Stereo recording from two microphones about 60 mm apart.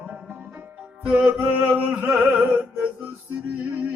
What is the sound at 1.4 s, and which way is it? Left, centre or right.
Chant, right.